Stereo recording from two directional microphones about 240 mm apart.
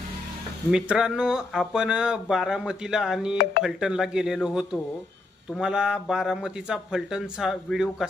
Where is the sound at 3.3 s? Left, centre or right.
Left.